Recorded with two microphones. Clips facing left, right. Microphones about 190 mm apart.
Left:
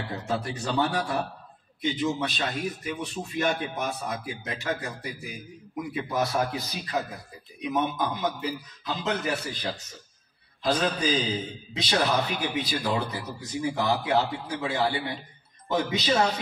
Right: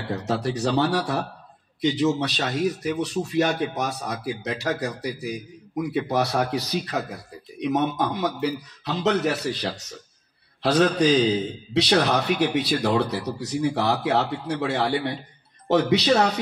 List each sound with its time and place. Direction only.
0.1 s speech: 75° right (ahead or behind)